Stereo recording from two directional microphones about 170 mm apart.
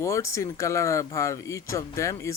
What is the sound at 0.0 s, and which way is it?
Speech, 20° left (ahead or behind).